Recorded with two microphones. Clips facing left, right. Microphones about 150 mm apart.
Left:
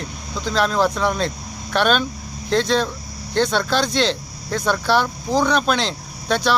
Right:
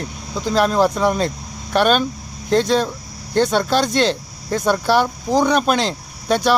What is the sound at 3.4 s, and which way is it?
Speech, 10° right (ahead or behind).